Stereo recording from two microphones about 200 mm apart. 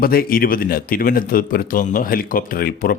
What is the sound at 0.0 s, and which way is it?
A man's voice, 45° left (ahead or behind).